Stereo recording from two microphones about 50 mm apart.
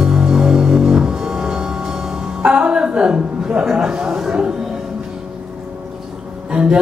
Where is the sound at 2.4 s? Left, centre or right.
Right.